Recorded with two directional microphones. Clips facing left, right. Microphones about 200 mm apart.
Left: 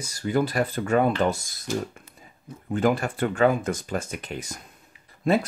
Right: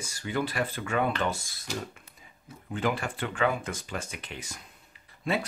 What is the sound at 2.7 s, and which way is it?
Speech, 45° left (ahead or behind).